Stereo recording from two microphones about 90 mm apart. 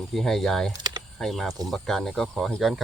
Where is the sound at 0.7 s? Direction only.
50° right (ahead or behind).